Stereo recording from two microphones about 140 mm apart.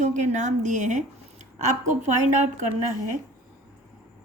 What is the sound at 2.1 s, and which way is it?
Speech, 60° right (ahead or behind).